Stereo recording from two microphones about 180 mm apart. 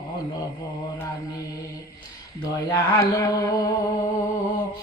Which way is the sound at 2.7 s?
20° left (ahead or behind).